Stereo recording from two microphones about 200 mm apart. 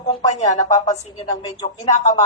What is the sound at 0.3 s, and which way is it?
Speech, 35° left (ahead or behind).